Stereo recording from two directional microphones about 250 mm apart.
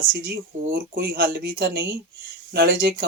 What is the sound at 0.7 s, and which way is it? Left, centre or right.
Speech, right.